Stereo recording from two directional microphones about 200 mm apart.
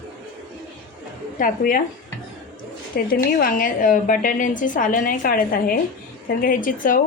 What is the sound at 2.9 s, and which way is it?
A woman's voice, 45° left (ahead or behind).